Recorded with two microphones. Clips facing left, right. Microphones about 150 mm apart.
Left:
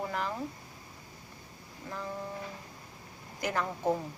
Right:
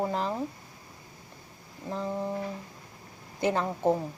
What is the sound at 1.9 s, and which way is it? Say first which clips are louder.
Speech: right 6 dB; 25° right (ahead or behind).